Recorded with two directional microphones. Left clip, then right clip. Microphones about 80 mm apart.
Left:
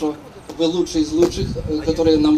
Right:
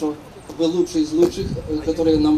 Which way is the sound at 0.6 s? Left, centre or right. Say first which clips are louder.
Left 1 dB; centre.